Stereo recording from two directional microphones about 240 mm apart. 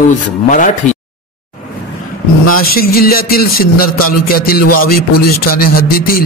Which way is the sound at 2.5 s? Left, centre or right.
Left.